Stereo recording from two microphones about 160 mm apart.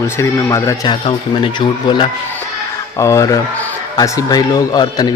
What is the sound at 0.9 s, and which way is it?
Speech, 35° left (ahead or behind).